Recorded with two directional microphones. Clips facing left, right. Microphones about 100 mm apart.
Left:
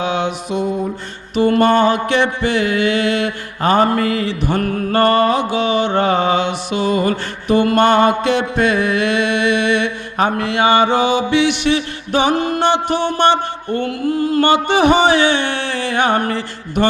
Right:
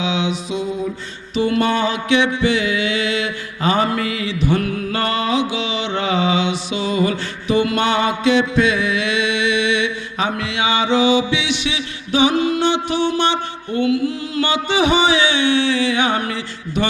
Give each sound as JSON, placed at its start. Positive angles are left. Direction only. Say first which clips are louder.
{"t": 0.0, "sound": "mantra", "louder": "left 2 dB", "side_deg": 55}
{"t": 1.4, "sound": "music", "louder": "left 5 dB", "side_deg": 50}